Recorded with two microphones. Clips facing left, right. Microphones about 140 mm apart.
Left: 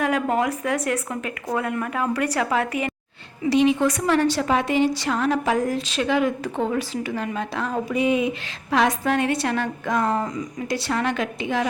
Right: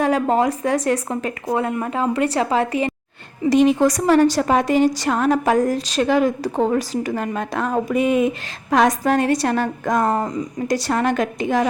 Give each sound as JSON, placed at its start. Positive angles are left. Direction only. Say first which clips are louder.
{"t": 0.0, "sound": "a woman's voice", "louder": "right 4 dB", "side_deg": -30}
{"t": 3.5, "sound": "a woman's voice", "louder": "right 4 dB", "side_deg": -45}